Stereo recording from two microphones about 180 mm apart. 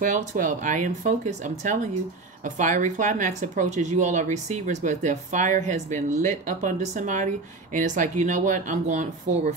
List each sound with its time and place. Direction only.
0.0 s speech: 45° right (ahead or behind)